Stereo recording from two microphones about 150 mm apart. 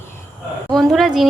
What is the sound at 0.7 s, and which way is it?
Speech, centre (ahead or behind).